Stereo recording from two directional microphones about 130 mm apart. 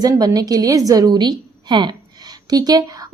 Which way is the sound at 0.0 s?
30° right (ahead or behind).